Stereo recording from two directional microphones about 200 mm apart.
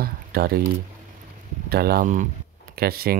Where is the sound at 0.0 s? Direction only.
50° right (ahead or behind).